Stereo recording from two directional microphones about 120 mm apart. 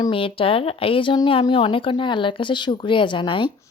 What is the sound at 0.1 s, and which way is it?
A woman's voice, 50° left (ahead or behind).